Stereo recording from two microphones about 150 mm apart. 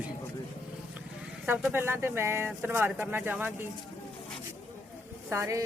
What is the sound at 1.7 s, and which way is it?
Speech, 15° right (ahead or behind).